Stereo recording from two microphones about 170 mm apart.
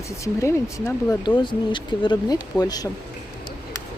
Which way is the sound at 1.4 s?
25° left (ahead or behind).